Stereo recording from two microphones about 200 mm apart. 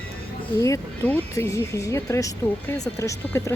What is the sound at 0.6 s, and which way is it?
Speech, 10° left (ahead or behind).